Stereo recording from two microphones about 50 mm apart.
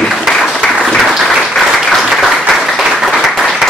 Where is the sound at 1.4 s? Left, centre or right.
Centre.